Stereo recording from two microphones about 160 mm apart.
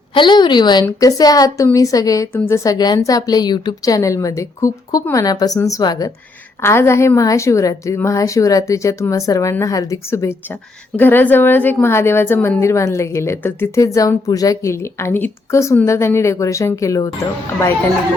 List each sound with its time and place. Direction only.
0.1 s a woman's voice: 30° left (ahead or behind)